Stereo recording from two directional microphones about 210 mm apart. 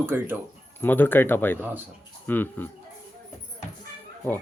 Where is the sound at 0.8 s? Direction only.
10° left (ahead or behind).